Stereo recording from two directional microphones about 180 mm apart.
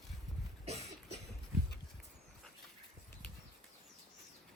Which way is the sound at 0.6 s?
35° right (ahead or behind).